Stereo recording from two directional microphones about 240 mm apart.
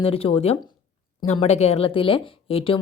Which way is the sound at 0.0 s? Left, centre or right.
Left.